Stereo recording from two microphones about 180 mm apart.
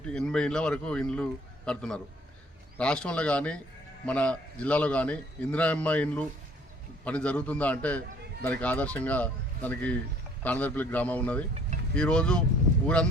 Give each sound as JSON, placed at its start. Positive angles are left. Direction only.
{"t": 0.1, "sound": "a man's voice", "side_deg": 5}